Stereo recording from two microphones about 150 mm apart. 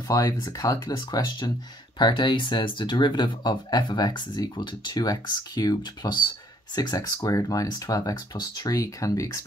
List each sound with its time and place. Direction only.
0.1 s speech: 25° left (ahead or behind)